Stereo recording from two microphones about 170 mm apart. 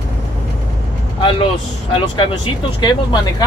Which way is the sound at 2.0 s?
30° left (ahead or behind).